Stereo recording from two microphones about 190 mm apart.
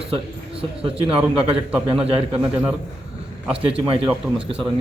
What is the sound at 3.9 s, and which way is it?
Speech, 30° right (ahead or behind).